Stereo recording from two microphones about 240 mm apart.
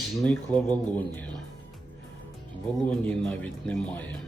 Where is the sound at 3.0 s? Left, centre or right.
Centre.